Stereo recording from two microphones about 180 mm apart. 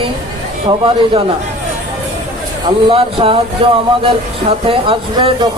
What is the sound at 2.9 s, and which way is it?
Speech, 30° right (ahead or behind).